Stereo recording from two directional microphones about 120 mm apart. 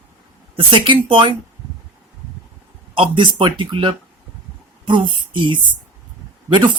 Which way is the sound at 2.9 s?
45° right (ahead or behind).